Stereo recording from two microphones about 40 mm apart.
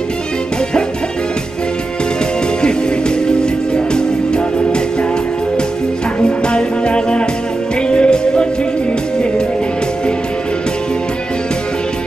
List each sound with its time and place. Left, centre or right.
3.3 s music: left
6.2 s music: left